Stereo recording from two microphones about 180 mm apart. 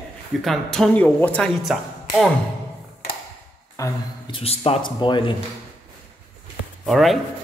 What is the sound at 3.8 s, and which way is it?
Speech, 15° left (ahead or behind).